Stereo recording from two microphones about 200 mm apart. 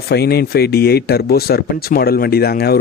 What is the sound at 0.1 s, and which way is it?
Speech, 55° left (ahead or behind).